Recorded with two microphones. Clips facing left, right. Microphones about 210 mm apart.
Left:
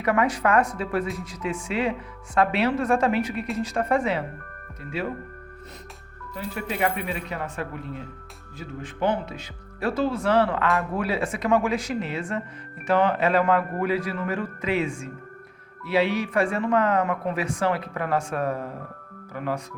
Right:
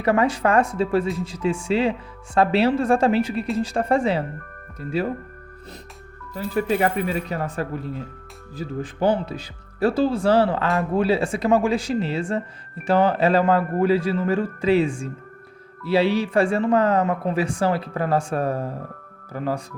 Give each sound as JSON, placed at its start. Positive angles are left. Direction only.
{"t": 0.0, "sound": "speech", "side_deg": -30}
{"t": 6.3, "sound": "speech", "side_deg": -35}